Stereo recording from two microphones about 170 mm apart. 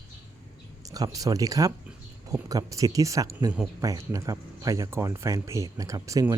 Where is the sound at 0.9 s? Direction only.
20° right (ahead or behind).